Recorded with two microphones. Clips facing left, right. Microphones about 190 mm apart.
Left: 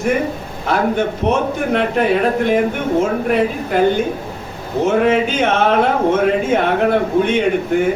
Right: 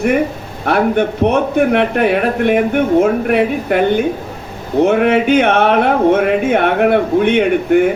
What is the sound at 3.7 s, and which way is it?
A man's voice, 65° right (ahead or behind).